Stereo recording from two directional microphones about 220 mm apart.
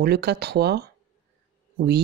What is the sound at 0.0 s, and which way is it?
Speech, 45° right (ahead or behind).